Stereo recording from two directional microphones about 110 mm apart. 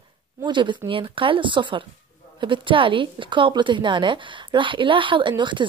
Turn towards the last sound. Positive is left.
turn(degrees=-45)  # may be behind; listen again after turning